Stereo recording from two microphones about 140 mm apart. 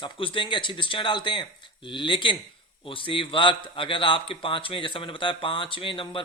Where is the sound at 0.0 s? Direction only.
40° left (ahead or behind).